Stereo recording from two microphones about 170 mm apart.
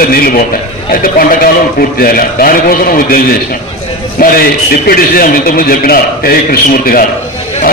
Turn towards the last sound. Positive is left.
turn(degrees=60)  # may be behind; listen again after turning